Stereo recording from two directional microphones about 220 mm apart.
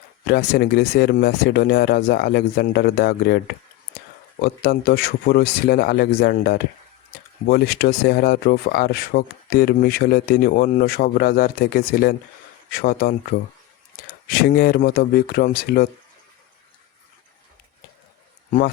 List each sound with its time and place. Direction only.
0.3 s speech: 45° left (ahead or behind)
14.3 s speech: 40° left (ahead or behind)